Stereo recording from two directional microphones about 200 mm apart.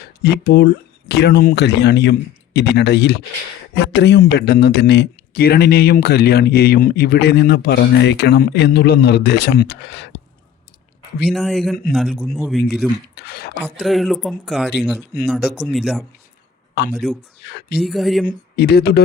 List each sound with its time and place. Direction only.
0.2 s speech: 55° left (ahead or behind)
11.3 s a man's voice: centre (ahead or behind)
13.1 s speech: 55° left (ahead or behind)
13.7 s a man's voice: centre (ahead or behind)
17.4 s speech: 55° left (ahead or behind)
17.7 s a man's voice: centre (ahead or behind)
18.3 s speech: 55° left (ahead or behind)